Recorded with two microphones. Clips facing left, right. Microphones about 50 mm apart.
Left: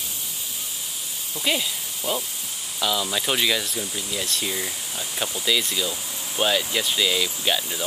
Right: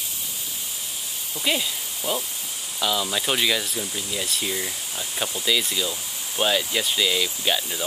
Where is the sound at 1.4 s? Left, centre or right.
Centre.